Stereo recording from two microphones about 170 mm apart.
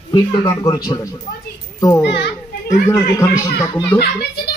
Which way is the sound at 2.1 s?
80° left.